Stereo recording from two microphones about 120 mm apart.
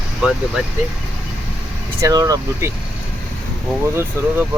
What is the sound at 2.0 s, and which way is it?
Speech, 30° right (ahead or behind).